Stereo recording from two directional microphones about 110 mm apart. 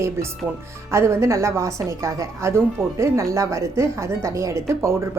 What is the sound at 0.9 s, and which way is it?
A woman's voice, 25° right (ahead or behind).